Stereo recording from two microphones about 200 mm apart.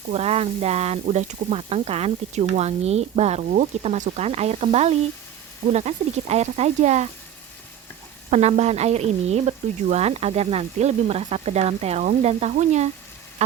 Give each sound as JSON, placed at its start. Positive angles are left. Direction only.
{"t": 0.1, "sound": "speech", "side_deg": -30}
{"t": 8.3, "sound": "speech", "side_deg": -35}